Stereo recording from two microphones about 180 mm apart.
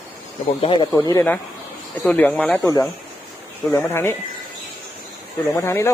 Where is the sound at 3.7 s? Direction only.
10° left (ahead or behind).